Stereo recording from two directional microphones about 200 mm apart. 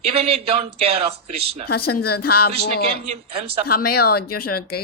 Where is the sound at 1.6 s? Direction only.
50° left (ahead or behind).